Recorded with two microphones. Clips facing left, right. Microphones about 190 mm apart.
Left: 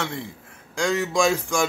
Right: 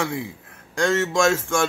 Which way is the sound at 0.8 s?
10° left (ahead or behind).